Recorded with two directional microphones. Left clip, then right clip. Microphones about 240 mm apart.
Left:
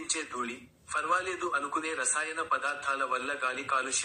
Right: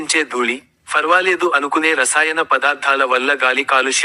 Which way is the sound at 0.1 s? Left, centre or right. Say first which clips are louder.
Right 18 dB; right.